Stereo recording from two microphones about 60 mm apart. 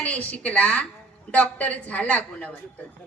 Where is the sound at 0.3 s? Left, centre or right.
Left.